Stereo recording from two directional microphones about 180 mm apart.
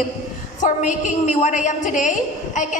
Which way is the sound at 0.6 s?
45° left (ahead or behind).